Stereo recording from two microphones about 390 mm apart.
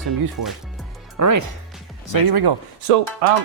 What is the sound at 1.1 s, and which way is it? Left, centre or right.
Speech, right.